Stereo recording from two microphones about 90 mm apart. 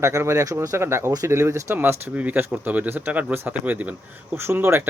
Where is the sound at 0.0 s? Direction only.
30° right (ahead or behind).